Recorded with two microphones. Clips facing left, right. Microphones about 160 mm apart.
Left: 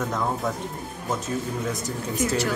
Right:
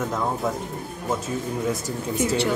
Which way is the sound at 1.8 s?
30° right (ahead or behind).